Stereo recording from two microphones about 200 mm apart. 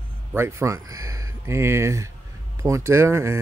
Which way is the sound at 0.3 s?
10° right (ahead or behind).